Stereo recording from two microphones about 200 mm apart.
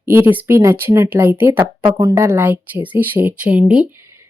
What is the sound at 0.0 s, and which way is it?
Speech, 10° right (ahead or behind).